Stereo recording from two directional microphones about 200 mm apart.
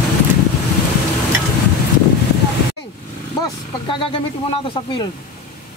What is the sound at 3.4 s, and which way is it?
Speech, 25° left (ahead or behind).